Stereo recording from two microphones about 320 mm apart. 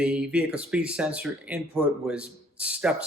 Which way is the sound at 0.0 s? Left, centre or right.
Centre.